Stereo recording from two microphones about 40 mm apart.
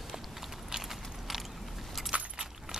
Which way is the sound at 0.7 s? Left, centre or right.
Centre.